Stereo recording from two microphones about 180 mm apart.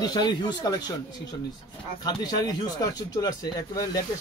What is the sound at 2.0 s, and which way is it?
Speech, 25° left (ahead or behind).